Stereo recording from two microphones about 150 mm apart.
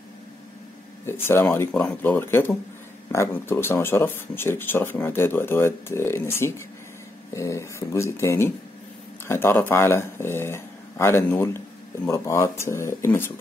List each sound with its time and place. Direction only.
1.0 s speech: 15° left (ahead or behind)